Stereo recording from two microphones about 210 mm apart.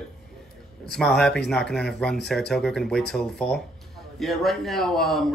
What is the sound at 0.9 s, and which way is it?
A man's voice, centre (ahead or behind).